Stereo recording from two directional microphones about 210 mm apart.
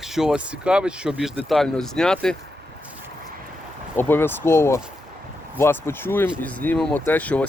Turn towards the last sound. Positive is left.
turn(degrees=5)  # may be behind; listen again after turning